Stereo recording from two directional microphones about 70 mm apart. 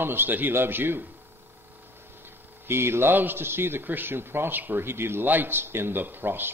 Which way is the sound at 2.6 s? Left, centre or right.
Right.